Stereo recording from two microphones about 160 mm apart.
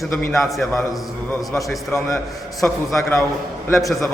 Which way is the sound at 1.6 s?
Centre (ahead or behind).